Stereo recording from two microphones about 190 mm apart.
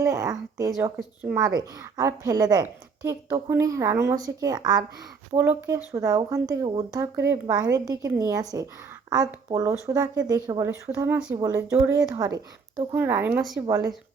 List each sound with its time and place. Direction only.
0.0 s a sound: 15° right (ahead or behind)
0.9 s speech: 5° right (ahead or behind)
1.4 s a woman's voice: 20° right (ahead or behind); by 13.7 s centre (ahead or behind)